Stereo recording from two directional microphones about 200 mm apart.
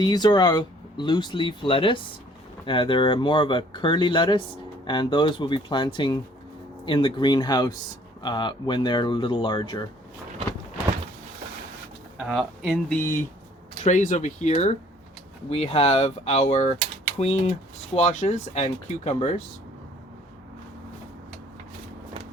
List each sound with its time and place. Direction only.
0.0 s speech: 20° left (ahead or behind)
12.2 s speech: centre (ahead or behind)
13.8 s speech: 40° left (ahead or behind)